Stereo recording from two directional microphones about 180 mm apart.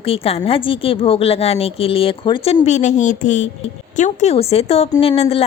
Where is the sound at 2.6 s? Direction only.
40° left (ahead or behind).